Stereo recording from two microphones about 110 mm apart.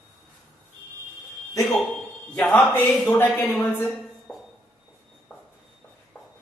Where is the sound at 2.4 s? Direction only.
5° left (ahead or behind).